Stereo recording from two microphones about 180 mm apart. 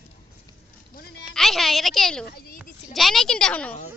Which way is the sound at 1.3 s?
Centre (ahead or behind).